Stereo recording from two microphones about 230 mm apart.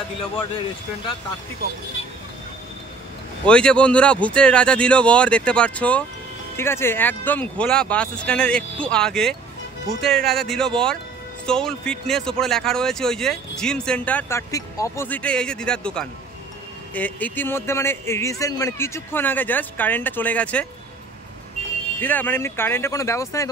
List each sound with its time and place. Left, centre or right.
3.4 s a man's voice: centre
22.0 s a man's voice: centre